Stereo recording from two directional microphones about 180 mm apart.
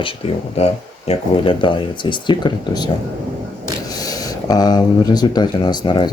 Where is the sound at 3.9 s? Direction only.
20° left (ahead or behind).